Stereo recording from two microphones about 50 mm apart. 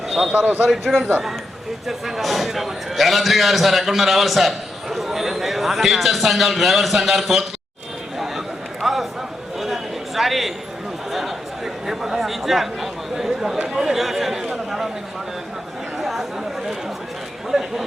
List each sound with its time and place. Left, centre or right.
0.3 s a man's voice: right
1.9 s a man's voice: centre
8.8 s a sound: centre
13.7 s chatter: centre
16.0 s chatter: centre
17.5 s a sound: centre